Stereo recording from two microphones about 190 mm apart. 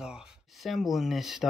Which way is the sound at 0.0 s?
Centre (ahead or behind).